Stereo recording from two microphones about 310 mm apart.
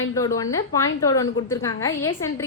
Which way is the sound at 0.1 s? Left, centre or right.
Centre.